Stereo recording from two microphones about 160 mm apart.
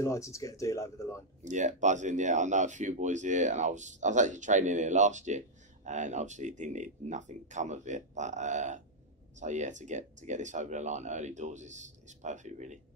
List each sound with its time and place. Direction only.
0.0 s speech: 20° left (ahead or behind)
1.4 s speech: 50° right (ahead or behind)